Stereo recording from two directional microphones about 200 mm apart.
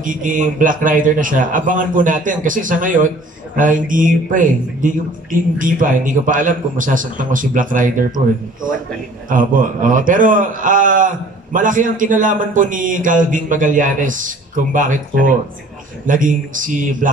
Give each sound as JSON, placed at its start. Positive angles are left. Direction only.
{"t": 0.0, "sound": "a man's voice", "side_deg": -40}
{"t": 9.3, "sound": "a man's voice", "side_deg": -40}